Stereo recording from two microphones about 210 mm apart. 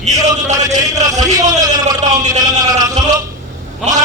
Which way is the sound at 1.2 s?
20° right (ahead or behind).